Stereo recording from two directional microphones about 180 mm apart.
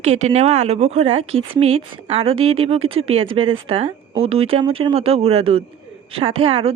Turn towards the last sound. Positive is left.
turn(degrees=-30)  # may be behind; listen again after turning